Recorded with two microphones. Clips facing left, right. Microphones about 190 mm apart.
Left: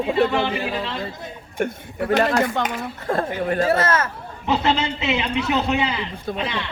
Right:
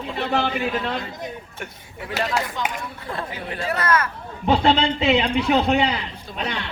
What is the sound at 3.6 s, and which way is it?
Speech, 25° left (ahead or behind).